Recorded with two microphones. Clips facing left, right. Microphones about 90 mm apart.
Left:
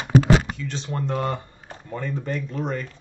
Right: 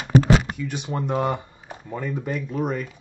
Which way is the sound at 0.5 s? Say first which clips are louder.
Right 2 dB; 15° right (ahead or behind).